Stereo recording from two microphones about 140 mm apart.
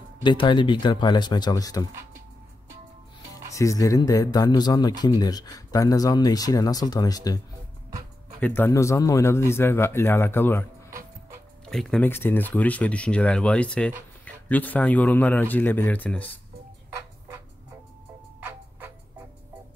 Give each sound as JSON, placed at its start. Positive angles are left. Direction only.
{"t": 0.2, "sound": "speech", "side_deg": 35}
{"t": 3.5, "sound": "speech", "side_deg": 25}
{"t": 8.4, "sound": "speech", "side_deg": 15}
{"t": 11.7, "sound": "speech", "side_deg": 5}